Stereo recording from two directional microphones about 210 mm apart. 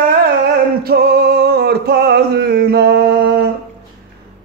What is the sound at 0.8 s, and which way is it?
Music, 50° right (ahead or behind).